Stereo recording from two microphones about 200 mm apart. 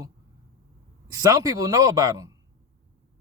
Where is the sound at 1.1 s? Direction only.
15° right (ahead or behind).